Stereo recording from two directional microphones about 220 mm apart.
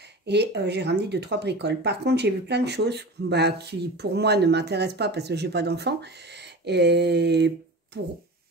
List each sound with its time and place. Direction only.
0.3 s speech: 50° right (ahead or behind)